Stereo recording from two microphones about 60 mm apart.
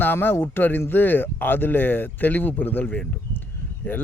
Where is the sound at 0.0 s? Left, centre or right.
Left.